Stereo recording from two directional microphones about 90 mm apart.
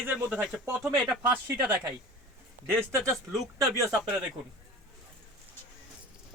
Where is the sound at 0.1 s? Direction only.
10° right (ahead or behind).